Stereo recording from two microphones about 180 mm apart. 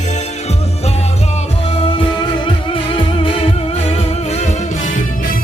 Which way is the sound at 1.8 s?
25° left (ahead or behind).